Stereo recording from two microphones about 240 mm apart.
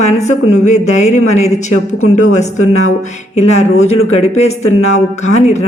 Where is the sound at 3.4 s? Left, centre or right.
Left.